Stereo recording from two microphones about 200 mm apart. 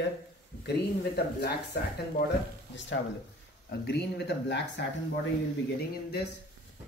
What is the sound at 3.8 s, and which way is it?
Speech, 55° left (ahead or behind).